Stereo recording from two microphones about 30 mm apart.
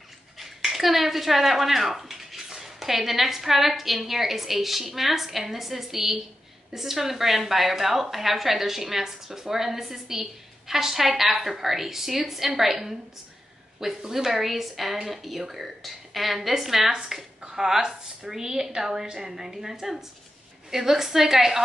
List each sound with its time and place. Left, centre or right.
0.4 s a woman's voice: centre
14.0 s a woman's voice: centre
14.4 s a woman's voice: centre
17.0 s a woman's voice: right